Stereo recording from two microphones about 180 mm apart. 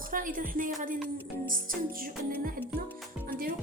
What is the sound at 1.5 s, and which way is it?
Music, 50° right (ahead or behind).